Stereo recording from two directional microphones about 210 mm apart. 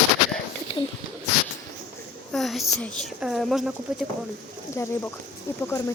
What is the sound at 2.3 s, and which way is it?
Speech, centre (ahead or behind).